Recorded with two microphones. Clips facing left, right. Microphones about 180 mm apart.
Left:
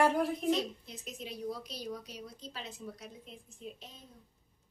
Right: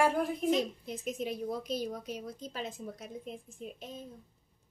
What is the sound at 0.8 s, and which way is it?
A woman's voice, 50° right (ahead or behind).